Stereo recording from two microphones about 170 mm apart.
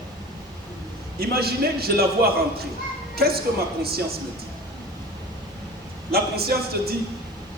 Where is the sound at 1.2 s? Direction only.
65° right (ahead or behind).